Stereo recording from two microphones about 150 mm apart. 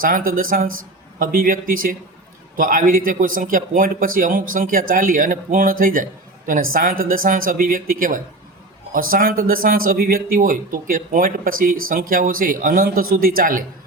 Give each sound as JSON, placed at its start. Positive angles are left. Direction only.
{"t": 0.0, "sound": "speech", "side_deg": -70}